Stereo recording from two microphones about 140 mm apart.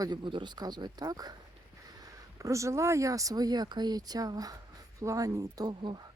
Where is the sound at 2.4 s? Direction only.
20° right (ahead or behind).